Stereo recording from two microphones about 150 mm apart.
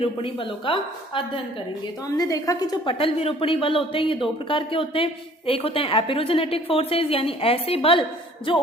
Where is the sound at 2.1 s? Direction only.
25° left (ahead or behind).